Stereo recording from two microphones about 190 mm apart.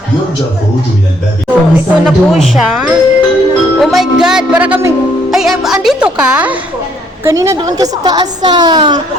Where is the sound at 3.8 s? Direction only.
Centre (ahead or behind).